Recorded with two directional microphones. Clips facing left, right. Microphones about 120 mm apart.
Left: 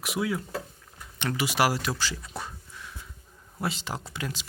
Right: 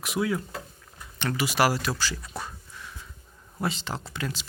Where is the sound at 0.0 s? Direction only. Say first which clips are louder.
Right 2 dB; 10° left (ahead or behind).